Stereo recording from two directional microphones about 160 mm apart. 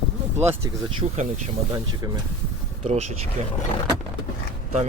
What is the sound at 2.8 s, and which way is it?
Speech, 45° right (ahead or behind).